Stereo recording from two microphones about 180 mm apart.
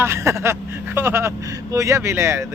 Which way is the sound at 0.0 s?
15° right (ahead or behind).